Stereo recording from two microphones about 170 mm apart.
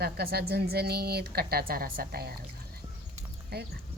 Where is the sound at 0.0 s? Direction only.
65° right (ahead or behind).